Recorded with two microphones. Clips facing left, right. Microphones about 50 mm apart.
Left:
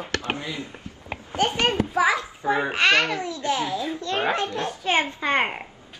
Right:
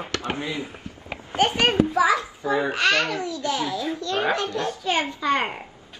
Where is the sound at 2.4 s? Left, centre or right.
Left.